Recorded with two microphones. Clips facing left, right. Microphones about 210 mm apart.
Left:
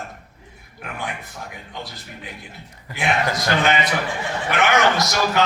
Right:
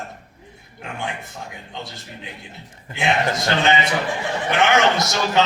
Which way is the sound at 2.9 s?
25° right (ahead or behind).